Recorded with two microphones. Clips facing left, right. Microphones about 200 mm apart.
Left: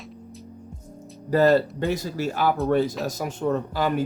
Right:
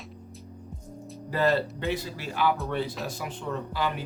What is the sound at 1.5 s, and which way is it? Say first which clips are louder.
Speech: left 6 dB; 45° left (ahead or behind).